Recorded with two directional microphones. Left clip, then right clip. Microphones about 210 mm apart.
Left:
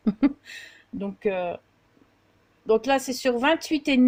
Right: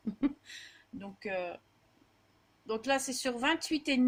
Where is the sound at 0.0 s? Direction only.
30° left (ahead or behind).